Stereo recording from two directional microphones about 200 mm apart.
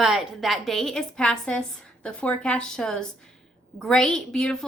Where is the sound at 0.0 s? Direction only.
Centre (ahead or behind).